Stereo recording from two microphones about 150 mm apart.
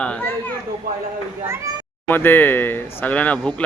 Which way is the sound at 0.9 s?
75° right (ahead or behind).